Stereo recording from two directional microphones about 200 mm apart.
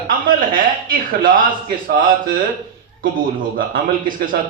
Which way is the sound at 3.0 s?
45° right (ahead or behind).